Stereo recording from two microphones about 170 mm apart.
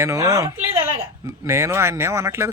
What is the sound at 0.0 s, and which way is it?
A woman's voice, 20° right (ahead or behind).